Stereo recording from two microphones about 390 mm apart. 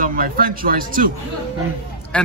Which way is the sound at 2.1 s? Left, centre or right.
Centre.